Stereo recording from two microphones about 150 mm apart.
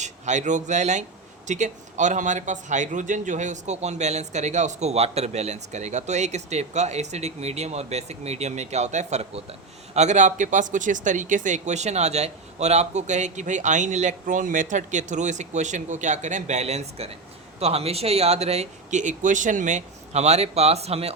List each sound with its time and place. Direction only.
0.0 s speech: 55° right (ahead or behind)